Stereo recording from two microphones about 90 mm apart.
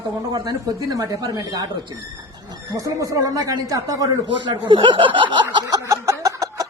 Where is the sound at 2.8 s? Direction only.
40° right (ahead or behind).